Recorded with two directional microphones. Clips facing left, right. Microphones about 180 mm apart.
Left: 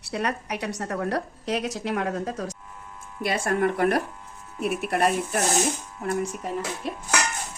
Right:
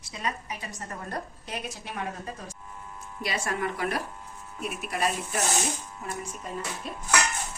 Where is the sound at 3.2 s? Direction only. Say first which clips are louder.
Left 7 dB; 55° left (ahead or behind).